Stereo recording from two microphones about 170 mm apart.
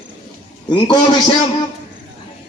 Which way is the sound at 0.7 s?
30° left (ahead or behind).